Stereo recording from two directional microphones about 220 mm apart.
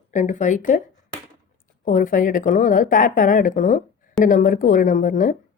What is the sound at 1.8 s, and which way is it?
Speech, 40° left (ahead or behind).